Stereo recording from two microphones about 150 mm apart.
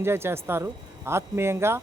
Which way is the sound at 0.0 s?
15° right (ahead or behind).